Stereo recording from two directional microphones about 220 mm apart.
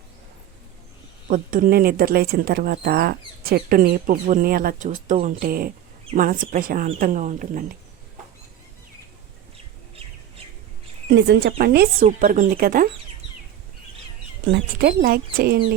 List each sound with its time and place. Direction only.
1.3 s speech: 40° right (ahead or behind)
11.1 s speech: 50° right (ahead or behind)
14.5 s speech: 45° right (ahead or behind)